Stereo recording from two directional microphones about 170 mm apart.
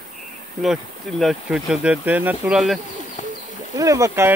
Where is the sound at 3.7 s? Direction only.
20° right (ahead or behind).